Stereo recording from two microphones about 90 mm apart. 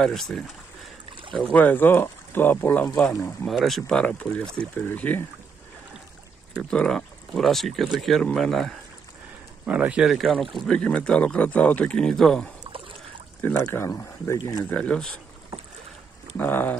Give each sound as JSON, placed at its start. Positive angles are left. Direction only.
{"t": 0.0, "sound": "speech", "side_deg": 5}
{"t": 1.1, "sound": "boat", "side_deg": -65}
{"t": 1.4, "sound": "speech", "side_deg": 15}
{"t": 3.1, "sound": "speech", "side_deg": 35}
{"t": 3.4, "sound": "speech", "side_deg": 0}
{"t": 4.0, "sound": "speech", "side_deg": 15}
{"t": 6.7, "sound": "speech", "side_deg": 10}
{"t": 9.7, "sound": "speech", "side_deg": -15}
{"t": 10.0, "sound": "speech", "side_deg": 0}
{"t": 10.7, "sound": "speech", "side_deg": 10}
{"t": 13.4, "sound": "speech", "side_deg": 25}
{"t": 14.7, "sound": "speech", "side_deg": 15}
{"t": 16.3, "sound": "speech", "side_deg": 20}